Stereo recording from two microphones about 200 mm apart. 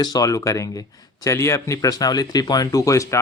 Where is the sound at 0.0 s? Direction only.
20° left (ahead or behind).